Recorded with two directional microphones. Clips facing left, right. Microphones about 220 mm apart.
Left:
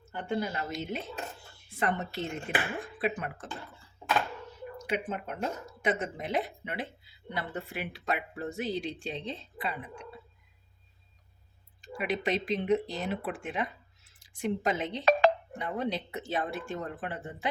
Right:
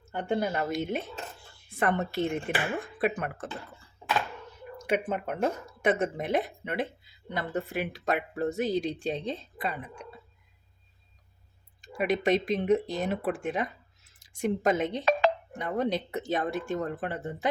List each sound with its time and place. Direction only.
0.2 s speech: 55° right (ahead or behind)
4.9 s speech: 55° right (ahead or behind)
11.8 s speech: 45° right (ahead or behind)